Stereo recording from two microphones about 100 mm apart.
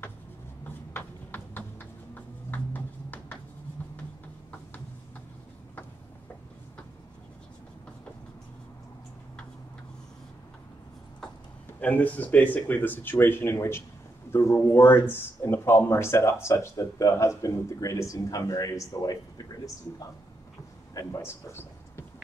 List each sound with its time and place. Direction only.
0.9 s a sound: 20° left (ahead or behind)
11.8 s speech: 15° left (ahead or behind); by 20.1 s 35° left (ahead or behind)
21.0 s speech: 25° left (ahead or behind)